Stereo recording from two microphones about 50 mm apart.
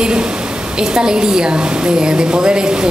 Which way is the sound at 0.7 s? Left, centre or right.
Centre.